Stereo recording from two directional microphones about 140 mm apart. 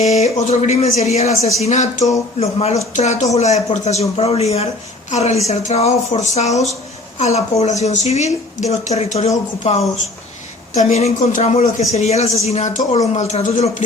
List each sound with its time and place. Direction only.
0.0 s speech: 50° left (ahead or behind)
2.4 s speech: 45° left (ahead or behind)